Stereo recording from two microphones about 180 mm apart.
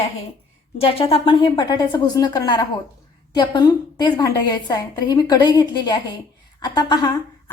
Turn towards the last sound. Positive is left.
turn(degrees=25)  # may be behind; listen again after turning